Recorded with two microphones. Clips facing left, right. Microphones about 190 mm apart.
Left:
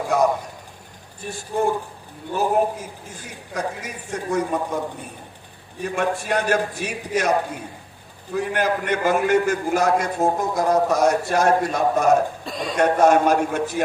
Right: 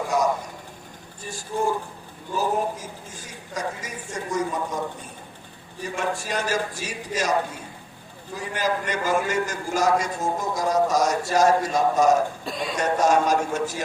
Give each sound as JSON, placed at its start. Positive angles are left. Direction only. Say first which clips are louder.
{"t": 0.1, "sound": "a sound", "louder": "left 4 dB", "side_deg": 60}
{"t": 1.2, "sound": "a man's voice", "louder": "left 3 dB", "side_deg": 60}
{"t": 5.8, "sound": "a man's voice", "louder": "left 4 dB", "side_deg": 60}
{"t": 12.5, "sound": "speech", "louder": "left 1 dB", "side_deg": 0}
{"t": 12.7, "sound": "a man's voice", "louder": "left 5 dB", "side_deg": 60}